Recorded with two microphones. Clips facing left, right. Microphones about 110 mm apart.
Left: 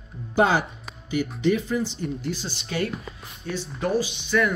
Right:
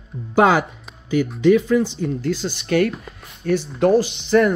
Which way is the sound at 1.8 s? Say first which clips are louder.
Right 6 dB; 90° right.